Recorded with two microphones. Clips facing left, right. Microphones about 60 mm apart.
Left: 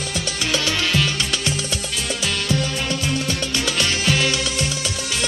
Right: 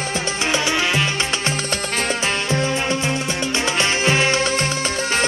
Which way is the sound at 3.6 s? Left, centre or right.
Right.